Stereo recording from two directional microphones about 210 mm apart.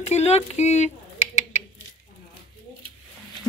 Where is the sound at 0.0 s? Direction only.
30° left (ahead or behind).